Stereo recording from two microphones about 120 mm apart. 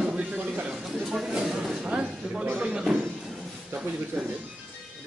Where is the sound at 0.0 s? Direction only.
10° right (ahead or behind).